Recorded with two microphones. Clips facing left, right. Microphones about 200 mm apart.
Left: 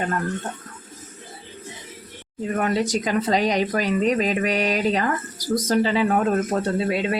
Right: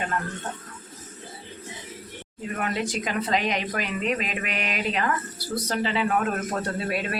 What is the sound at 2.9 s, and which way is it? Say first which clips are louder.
Speech: left 5 dB; 40° left (ahead or behind).